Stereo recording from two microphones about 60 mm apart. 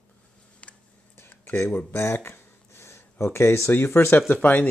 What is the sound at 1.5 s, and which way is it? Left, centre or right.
Speech, left.